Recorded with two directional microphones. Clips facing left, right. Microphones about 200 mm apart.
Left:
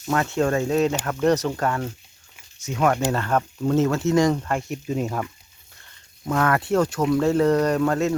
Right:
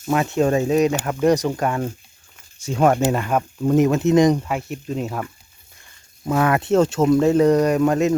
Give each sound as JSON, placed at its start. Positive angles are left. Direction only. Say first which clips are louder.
{"t": 0.1, "sound": "speech", "louder": "right 3 dB", "side_deg": -15}
{"t": 2.6, "sound": "speech", "louder": "right 4 dB", "side_deg": -30}
{"t": 3.1, "sound": "speech", "louder": "right 2 dB", "side_deg": -10}
{"t": 4.4, "sound": "speech", "louder": "even", "side_deg": -5}
{"t": 6.3, "sound": "speech", "louder": "right 3 dB", "side_deg": -20}